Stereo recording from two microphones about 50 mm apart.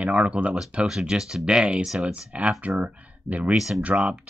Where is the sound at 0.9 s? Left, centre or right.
Centre.